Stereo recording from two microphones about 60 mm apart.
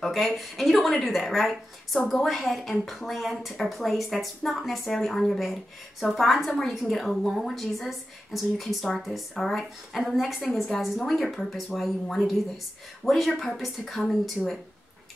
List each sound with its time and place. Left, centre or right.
0.0 s a woman's voice: centre